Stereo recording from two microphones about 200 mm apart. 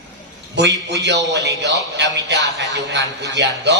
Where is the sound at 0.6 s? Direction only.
60° right (ahead or behind).